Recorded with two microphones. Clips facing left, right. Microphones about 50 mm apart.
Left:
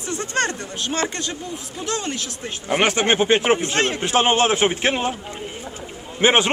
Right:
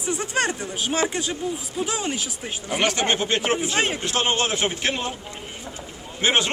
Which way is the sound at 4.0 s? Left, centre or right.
Left.